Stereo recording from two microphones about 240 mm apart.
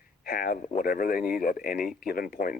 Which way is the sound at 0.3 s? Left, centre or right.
Left.